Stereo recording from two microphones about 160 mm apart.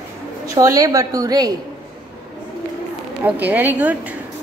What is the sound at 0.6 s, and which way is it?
Speech, 20° right (ahead or behind).